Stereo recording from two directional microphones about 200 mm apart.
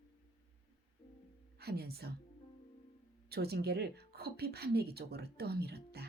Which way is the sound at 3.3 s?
55° right (ahead or behind).